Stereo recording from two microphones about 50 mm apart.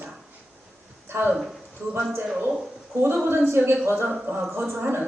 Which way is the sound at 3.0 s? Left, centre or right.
Right.